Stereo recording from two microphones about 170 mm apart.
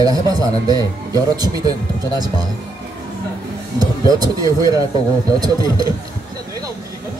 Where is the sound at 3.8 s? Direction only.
20° right (ahead or behind).